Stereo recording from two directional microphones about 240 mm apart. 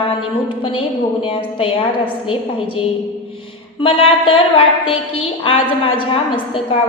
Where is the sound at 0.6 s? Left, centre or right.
Left.